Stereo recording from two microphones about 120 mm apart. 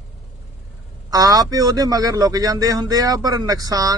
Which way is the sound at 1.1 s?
30° right (ahead or behind).